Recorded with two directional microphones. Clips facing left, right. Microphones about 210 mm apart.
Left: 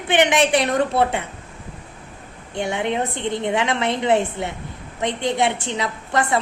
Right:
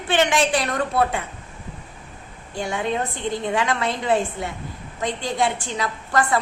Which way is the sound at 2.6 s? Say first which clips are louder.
Left 2 dB; 25° left (ahead or behind).